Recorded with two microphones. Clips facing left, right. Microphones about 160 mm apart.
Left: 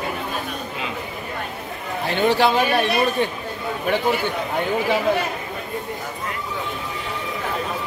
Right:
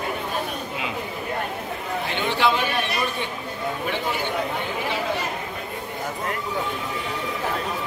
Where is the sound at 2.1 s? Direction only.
40° left (ahead or behind).